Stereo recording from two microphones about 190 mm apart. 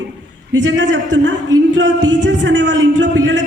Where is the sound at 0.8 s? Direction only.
75° right (ahead or behind).